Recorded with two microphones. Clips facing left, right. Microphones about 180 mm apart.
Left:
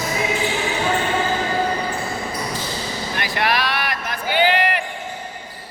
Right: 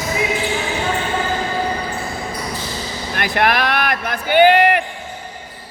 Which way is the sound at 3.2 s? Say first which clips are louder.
Right 5 dB; 55° right (ahead or behind).